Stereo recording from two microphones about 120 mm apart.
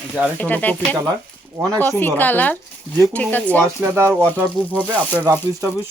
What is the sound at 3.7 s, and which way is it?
Speech, 20° right (ahead or behind).